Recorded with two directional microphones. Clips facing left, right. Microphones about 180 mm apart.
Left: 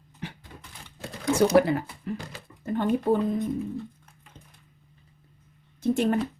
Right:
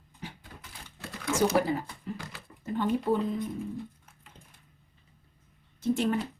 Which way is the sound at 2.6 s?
55° left (ahead or behind).